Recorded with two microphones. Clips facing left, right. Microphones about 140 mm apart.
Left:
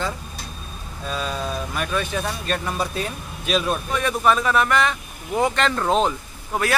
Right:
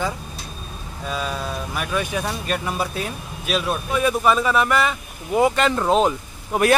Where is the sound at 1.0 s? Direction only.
5° right (ahead or behind).